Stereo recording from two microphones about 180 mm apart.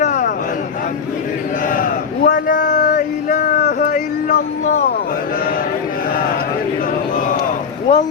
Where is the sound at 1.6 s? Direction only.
50° left (ahead or behind).